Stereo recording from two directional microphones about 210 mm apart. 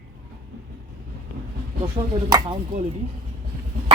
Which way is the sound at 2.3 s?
20° right (ahead or behind).